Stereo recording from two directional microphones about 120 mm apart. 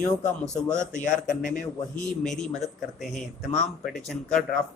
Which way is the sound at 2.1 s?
5° left (ahead or behind).